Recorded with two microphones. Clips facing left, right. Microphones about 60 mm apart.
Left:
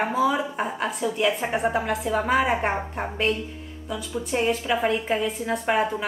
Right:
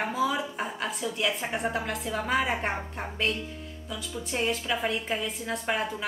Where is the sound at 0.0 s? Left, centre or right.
Centre.